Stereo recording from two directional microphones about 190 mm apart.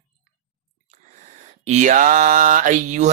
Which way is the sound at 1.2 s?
40° right (ahead or behind).